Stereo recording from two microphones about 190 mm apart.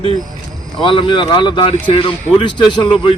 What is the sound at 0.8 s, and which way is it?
Speech, 25° left (ahead or behind).